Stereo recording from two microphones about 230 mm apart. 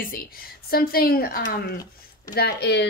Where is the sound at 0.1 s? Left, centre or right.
Left.